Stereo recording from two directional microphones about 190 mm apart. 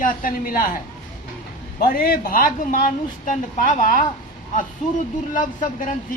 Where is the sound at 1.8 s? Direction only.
50° left (ahead or behind).